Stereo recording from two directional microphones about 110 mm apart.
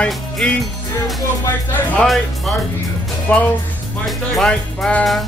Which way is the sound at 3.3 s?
15° left (ahead or behind).